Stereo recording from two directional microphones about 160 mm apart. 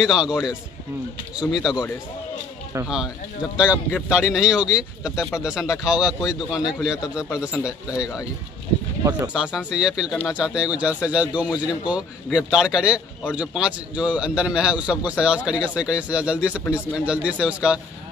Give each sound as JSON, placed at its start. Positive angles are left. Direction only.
{"t": 0.0, "sound": "speech", "side_deg": -5}
{"t": 3.5, "sound": "a man's voice", "side_deg": -10}
{"t": 7.2, "sound": "speech", "side_deg": 20}
{"t": 9.3, "sound": "a man's voice", "side_deg": -5}